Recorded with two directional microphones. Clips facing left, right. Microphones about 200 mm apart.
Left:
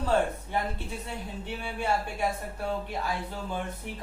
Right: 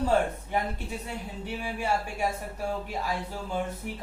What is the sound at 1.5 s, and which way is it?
Speech, 10° right (ahead or behind).